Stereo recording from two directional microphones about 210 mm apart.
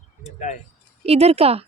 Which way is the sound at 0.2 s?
35° left (ahead or behind).